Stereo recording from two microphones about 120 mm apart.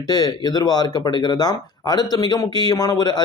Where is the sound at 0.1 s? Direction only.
35° left (ahead or behind).